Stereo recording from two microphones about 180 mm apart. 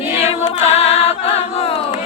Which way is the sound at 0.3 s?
35° left (ahead or behind).